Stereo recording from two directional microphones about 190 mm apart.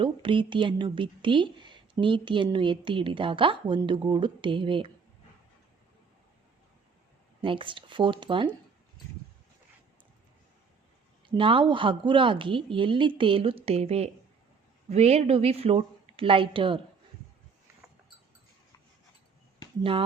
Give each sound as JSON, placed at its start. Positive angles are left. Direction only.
{"t": 0.0, "sound": "a woman's voice", "side_deg": -25}
{"t": 7.4, "sound": "a woman's voice", "side_deg": -25}
{"t": 11.3, "sound": "a woman's voice", "side_deg": -25}